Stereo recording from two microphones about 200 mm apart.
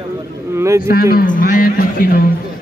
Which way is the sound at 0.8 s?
45° left (ahead or behind).